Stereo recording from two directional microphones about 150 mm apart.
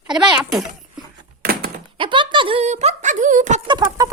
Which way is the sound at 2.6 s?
50° right (ahead or behind).